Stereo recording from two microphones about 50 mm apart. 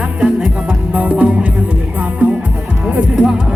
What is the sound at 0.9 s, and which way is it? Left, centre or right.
Music, right.